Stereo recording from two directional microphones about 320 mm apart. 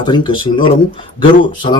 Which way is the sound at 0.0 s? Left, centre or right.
Centre.